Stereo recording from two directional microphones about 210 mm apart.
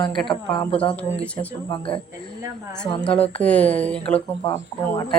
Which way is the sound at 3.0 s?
5° left (ahead or behind).